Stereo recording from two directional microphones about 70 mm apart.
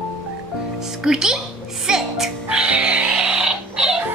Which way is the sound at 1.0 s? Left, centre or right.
Centre.